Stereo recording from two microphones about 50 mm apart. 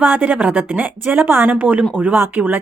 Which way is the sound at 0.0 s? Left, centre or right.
Right.